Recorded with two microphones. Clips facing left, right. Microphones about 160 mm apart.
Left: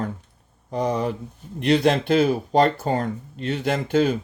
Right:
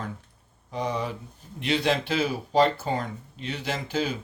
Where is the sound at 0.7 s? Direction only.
45° left (ahead or behind).